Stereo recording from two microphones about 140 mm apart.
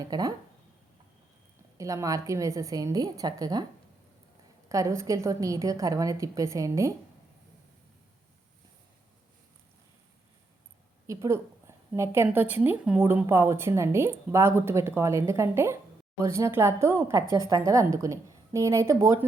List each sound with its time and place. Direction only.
0.0 s a woman's voice: 25° right (ahead or behind)
1.8 s a woman's voice: 25° right (ahead or behind)
4.7 s a woman's voice: 20° right (ahead or behind)
11.0 s a woman's voice: 20° right (ahead or behind)